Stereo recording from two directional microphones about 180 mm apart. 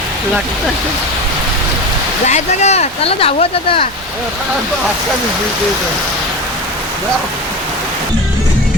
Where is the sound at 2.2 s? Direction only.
40° left (ahead or behind).